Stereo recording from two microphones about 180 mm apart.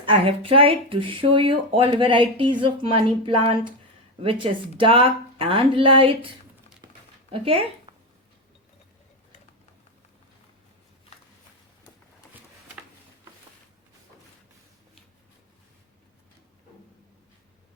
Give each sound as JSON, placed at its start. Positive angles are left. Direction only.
{"t": 0.0, "sound": "speech", "side_deg": -30}
{"t": 7.4, "sound": "speech", "side_deg": -30}